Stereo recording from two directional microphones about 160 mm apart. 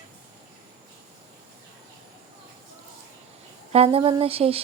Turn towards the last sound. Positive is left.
turn(degrees=-40)  # may be behind; listen again after turning